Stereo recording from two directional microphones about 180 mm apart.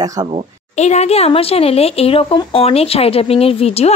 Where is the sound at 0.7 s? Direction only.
40° left (ahead or behind).